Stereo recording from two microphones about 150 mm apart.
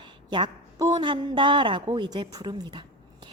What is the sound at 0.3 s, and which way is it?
A woman's voice, 30° right (ahead or behind).